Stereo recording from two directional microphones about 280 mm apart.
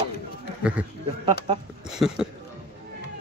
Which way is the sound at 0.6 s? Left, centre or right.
Centre.